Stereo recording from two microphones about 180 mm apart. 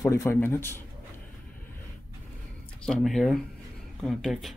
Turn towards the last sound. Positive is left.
turn(degrees=0)  # may be behind; listen again after turning